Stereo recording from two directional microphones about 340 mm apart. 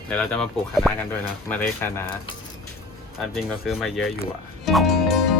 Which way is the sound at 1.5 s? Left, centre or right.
Centre.